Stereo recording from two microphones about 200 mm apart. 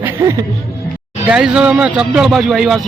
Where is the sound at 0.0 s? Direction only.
15° right (ahead or behind).